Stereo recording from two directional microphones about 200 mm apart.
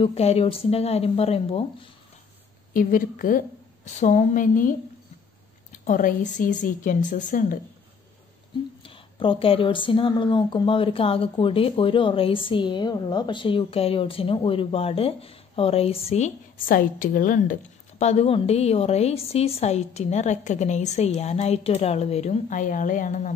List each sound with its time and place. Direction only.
0.0 s a woman's voice: 30° left (ahead or behind)
2.7 s a woman's voice: 45° left (ahead or behind)
5.9 s a woman's voice: 40° left (ahead or behind)
8.8 s a woman's voice: 25° left (ahead or behind)